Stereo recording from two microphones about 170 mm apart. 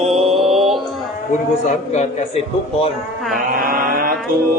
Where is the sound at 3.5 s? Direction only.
55° right (ahead or behind).